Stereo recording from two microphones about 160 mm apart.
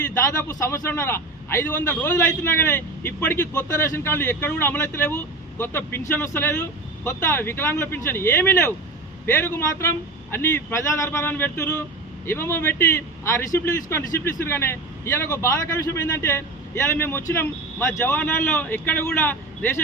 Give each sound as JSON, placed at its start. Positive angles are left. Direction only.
{"t": 0.4, "sound": "a man's voice", "side_deg": 15}